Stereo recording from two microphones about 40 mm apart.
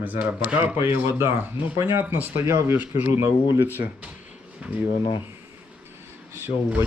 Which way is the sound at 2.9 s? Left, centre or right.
Right.